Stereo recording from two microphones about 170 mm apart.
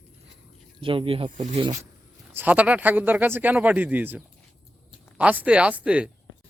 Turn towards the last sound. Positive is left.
turn(degrees=-5)  # may be behind; listen again after turning